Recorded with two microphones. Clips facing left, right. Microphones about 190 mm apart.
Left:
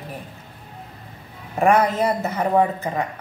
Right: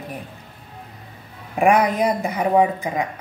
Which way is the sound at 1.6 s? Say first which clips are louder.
Right 1 dB; 15° right (ahead or behind).